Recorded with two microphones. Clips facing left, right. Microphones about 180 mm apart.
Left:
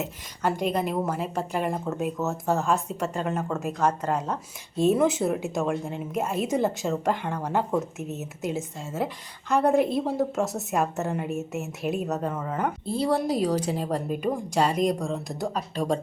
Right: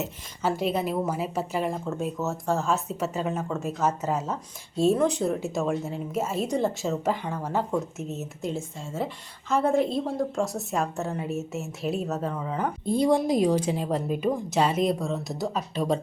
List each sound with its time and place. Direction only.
0.0 s speech: 5° right (ahead or behind)
12.8 s a woman's voice: 35° left (ahead or behind)
13.1 s speech: 15° right (ahead or behind)
13.8 s speech: centre (ahead or behind)